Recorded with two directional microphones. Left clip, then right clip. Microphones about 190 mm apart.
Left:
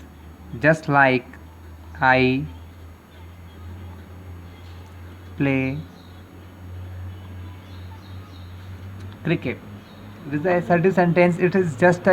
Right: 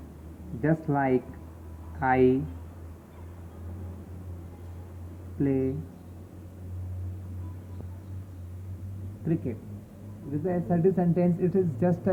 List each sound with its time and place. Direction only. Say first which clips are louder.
0.6 s speech: left 11 dB; 70° left (ahead or behind)
5.4 s speech: left 5 dB; 65° left (ahead or behind)
9.2 s speech: left 7 dB; 50° left (ahead or behind)